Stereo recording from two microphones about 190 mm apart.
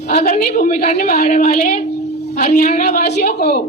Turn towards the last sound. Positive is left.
turn(degrees=55)  # may be behind; listen again after turning